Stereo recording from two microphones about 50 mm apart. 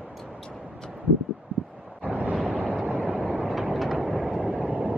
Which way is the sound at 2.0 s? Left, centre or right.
Right.